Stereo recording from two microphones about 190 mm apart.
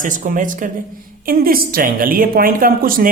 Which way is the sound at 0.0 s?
45° right (ahead or behind).